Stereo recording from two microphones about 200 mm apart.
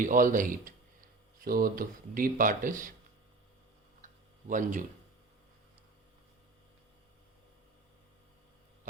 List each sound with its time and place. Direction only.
0.0 s a man's voice: 40° right (ahead or behind)
4.0 s tick-tock: 40° right (ahead or behind)